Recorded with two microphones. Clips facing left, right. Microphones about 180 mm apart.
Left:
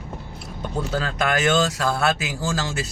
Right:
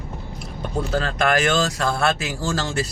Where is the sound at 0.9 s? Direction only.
5° left (ahead or behind).